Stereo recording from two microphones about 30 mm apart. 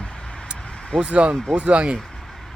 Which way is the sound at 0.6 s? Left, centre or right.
Left.